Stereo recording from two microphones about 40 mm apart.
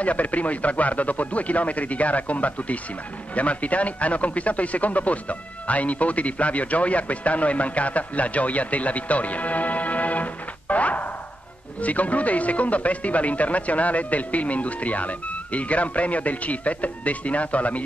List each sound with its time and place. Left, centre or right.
0.0 s speech: left